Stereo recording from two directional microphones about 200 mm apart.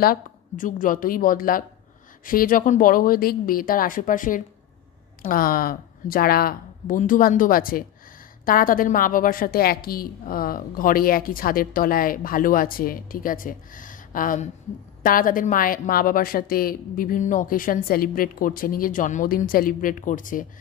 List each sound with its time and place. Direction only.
0.0 s a woman's voice: 45° left (ahead or behind)